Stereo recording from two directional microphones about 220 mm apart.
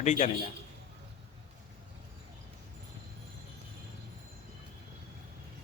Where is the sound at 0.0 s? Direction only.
30° left (ahead or behind).